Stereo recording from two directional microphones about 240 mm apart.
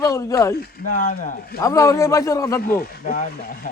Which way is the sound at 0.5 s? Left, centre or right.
Left.